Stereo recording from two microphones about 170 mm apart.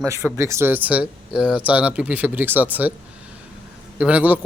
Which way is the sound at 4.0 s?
10° right (ahead or behind).